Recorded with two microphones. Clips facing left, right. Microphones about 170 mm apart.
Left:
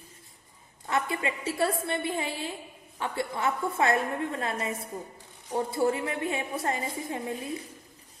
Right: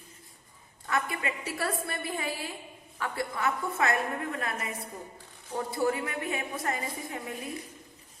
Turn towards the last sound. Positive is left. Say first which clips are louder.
# left 4 dB
turn(degrees=25)  # may be behind; listen again after turning